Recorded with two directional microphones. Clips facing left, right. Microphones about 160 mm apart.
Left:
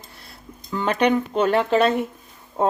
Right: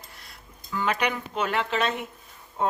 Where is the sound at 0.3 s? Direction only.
30° left (ahead or behind).